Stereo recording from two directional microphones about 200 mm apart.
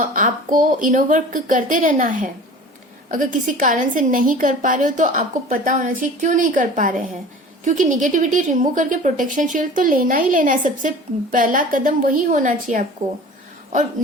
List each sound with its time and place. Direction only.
0.1 s a woman's voice: 40° right (ahead or behind)